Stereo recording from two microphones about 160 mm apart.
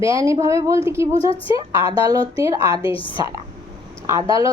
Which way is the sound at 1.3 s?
35° left (ahead or behind).